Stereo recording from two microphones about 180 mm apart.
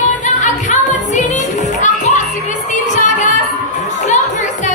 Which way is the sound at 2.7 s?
45° left (ahead or behind).